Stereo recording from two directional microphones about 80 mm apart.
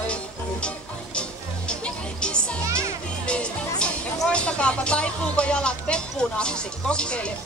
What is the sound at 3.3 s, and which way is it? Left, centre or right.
Speech, centre.